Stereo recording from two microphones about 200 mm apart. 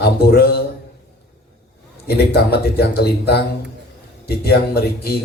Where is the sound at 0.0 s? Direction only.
50° left (ahead or behind).